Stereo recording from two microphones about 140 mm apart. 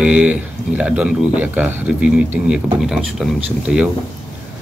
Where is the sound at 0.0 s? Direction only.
10° right (ahead or behind).